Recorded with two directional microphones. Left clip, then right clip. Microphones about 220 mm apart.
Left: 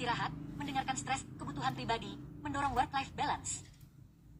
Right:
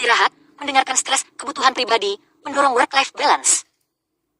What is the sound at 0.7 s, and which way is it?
Speech, 50° right (ahead or behind).